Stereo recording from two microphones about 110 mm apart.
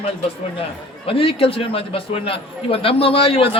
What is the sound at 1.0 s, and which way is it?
A man's voice, 55° left (ahead or behind).